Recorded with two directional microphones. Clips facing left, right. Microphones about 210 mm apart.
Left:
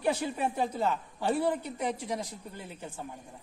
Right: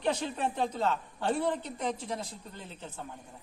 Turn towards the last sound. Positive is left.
turn(degrees=10)  # may be behind; listen again after turning